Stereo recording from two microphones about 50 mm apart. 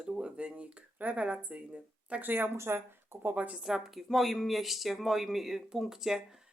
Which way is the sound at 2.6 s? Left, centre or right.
Right.